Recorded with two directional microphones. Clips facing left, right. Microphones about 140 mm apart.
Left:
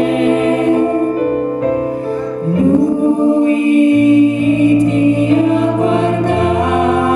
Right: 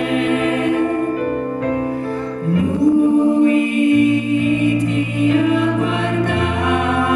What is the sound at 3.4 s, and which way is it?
Music, 30° left (ahead or behind).